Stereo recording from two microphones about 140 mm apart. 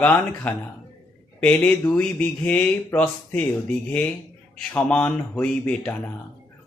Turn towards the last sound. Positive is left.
turn(degrees=10)  # may be behind; listen again after turning